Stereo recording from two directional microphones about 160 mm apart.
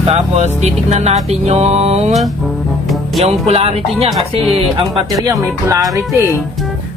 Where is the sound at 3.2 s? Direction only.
40° right (ahead or behind).